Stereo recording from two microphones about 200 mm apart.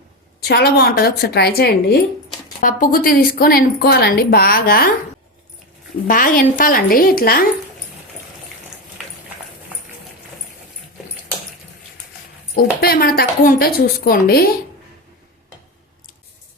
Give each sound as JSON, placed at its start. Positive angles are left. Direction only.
{"t": 0.4, "sound": "a woman's voice", "side_deg": 55}
{"t": 6.1, "sound": "a woman's voice", "side_deg": 45}
{"t": 12.5, "sound": "a woman's voice", "side_deg": 50}